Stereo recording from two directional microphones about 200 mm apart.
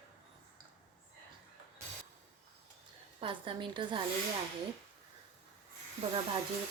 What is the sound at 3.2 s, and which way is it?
Speech, 25° right (ahead or behind).